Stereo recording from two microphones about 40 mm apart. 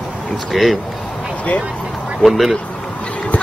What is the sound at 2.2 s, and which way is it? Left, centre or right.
Speech, centre.